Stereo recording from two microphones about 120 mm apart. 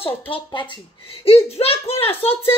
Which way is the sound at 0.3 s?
45° left (ahead or behind).